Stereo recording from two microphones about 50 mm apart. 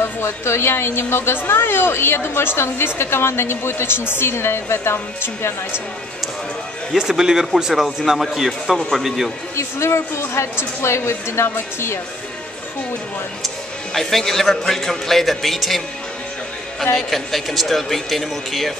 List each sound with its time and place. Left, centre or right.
0.0 s a woman's voice: left
6.9 s a man's voice: centre
9.6 s a woman's voice: left
13.9 s a man's voice: centre
16.9 s a man's voice: centre